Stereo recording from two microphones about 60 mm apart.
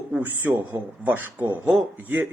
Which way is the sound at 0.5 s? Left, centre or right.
Right.